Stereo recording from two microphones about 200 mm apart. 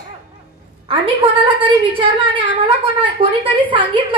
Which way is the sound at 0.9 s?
25° right (ahead or behind).